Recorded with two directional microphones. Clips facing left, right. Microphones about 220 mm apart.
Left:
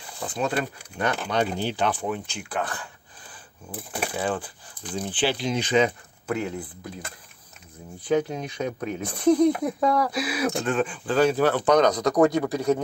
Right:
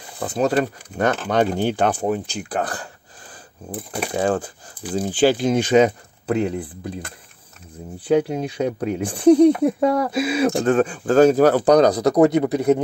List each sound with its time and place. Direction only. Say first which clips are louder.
0.2 s speech: right 7 dB; 40° right (ahead or behind)
4.1 s speech: right 9 dB; 45° right (ahead or behind)
8.4 s speech: right 6 dB; 30° right (ahead or behind)